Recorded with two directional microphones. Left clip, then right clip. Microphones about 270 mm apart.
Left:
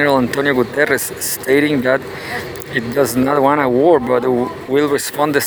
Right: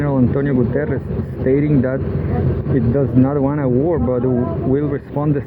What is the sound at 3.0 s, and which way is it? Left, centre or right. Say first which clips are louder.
Speech: left 5 dB; left.